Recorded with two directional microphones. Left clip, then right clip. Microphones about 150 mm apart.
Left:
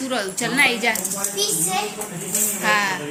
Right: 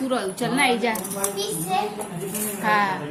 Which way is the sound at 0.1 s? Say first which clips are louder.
Left 3 dB; centre (ahead or behind).